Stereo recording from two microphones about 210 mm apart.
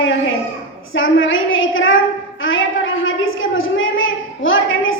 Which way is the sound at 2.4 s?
65° left (ahead or behind).